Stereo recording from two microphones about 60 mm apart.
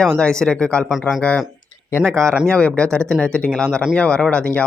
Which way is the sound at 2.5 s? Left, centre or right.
Centre.